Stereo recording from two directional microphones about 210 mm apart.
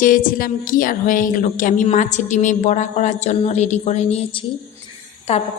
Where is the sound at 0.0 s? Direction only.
40° left (ahead or behind).